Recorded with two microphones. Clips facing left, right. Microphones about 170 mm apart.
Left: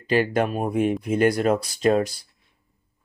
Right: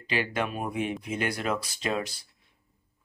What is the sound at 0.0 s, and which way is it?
Speech, 45° left (ahead or behind).